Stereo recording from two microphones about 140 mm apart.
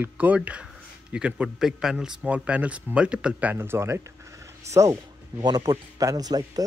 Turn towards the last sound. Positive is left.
turn(degrees=-25)  # may be behind; listen again after turning